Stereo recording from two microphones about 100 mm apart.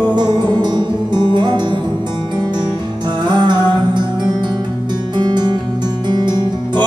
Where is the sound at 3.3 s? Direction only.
50° right (ahead or behind).